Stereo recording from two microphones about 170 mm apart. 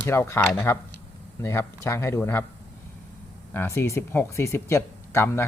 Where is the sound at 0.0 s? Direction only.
15° left (ahead or behind).